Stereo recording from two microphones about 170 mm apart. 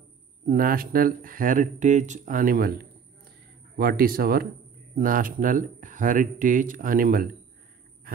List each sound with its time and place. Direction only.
0.5 s speech: 55° right (ahead or behind)